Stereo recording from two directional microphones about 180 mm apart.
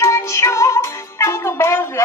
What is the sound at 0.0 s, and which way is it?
Music, 15° left (ahead or behind).